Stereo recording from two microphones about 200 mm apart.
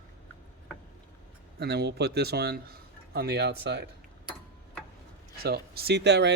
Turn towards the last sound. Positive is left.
turn(degrees=-60)  # may be behind; listen again after turning